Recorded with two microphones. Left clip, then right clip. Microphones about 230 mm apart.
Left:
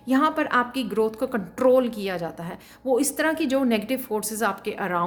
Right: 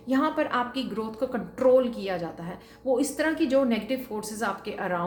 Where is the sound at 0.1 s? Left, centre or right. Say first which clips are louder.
Left 4 dB; left.